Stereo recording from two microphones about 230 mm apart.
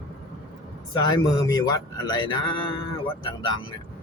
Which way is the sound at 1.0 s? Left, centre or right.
Centre.